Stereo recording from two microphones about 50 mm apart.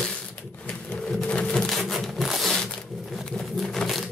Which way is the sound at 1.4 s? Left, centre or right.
Left.